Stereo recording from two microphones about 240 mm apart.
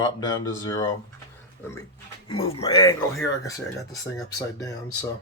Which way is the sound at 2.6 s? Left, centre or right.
Centre.